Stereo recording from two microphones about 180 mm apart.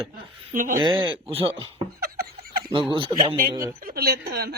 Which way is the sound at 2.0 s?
55° right (ahead or behind).